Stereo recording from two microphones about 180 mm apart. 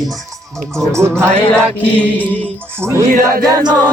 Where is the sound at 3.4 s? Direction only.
20° right (ahead or behind).